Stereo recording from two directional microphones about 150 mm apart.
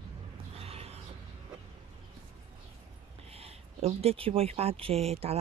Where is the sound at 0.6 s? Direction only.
40° right (ahead or behind).